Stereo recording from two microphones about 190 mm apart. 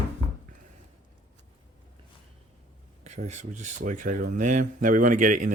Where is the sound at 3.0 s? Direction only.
35° right (ahead or behind).